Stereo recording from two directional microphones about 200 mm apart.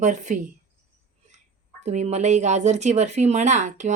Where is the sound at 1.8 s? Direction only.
35° right (ahead or behind).